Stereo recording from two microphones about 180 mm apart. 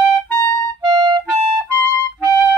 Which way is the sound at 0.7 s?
25° right (ahead or behind).